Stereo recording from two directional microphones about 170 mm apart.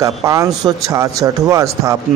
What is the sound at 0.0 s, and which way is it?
A man's voice, 20° right (ahead or behind).